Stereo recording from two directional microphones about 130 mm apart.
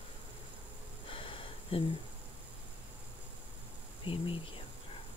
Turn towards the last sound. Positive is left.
turn(degrees=40)  # may be behind; listen again after turning